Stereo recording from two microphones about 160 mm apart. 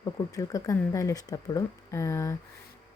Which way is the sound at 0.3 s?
20° left (ahead or behind).